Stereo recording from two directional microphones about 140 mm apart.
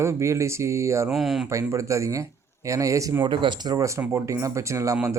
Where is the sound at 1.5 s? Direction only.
20° right (ahead or behind).